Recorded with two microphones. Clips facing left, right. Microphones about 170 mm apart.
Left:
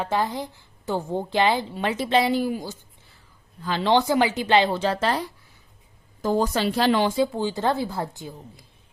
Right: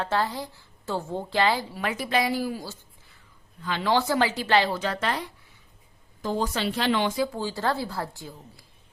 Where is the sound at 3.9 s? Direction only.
15° left (ahead or behind).